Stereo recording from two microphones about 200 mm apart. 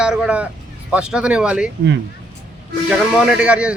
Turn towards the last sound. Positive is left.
turn(degrees=-5)  # may be behind; listen again after turning